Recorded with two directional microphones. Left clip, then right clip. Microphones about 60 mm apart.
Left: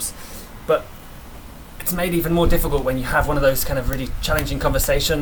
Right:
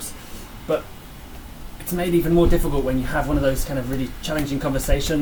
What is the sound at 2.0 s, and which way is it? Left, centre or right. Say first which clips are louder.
Speech: right 1 dB; left.